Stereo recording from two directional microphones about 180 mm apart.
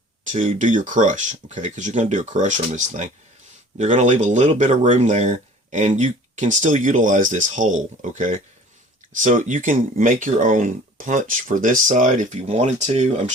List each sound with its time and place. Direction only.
0.3 s speech: 45° right (ahead or behind)